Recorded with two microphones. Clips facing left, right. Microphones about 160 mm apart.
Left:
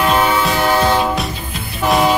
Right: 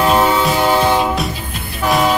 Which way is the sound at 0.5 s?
15° right (ahead or behind).